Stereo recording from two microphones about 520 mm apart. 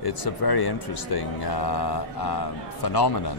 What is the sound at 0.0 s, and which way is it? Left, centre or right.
Speech, left.